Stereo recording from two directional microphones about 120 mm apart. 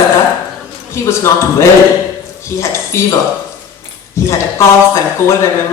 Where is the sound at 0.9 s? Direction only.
25° left (ahead or behind).